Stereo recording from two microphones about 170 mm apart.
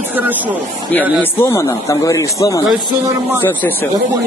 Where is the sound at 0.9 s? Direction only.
10° left (ahead or behind).